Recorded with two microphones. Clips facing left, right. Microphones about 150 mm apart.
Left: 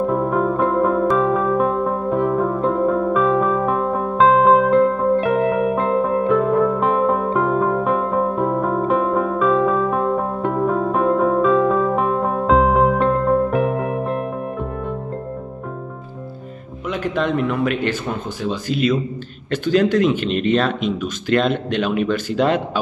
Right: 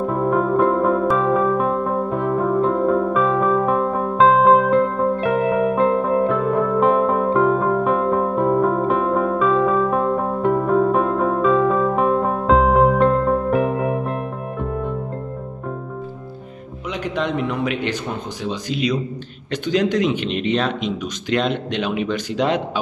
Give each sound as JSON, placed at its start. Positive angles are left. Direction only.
{"t": 0.0, "sound": "music", "side_deg": 0}
{"t": 16.9, "sound": "music", "side_deg": -15}
{"t": 17.5, "sound": "speech", "side_deg": -15}
{"t": 20.2, "sound": "speech", "side_deg": 45}
{"t": 22.0, "sound": "speech", "side_deg": -15}